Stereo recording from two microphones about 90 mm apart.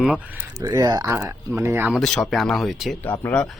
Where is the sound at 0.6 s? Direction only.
40° right (ahead or behind).